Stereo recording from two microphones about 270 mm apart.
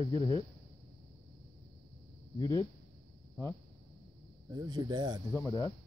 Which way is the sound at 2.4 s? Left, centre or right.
Centre.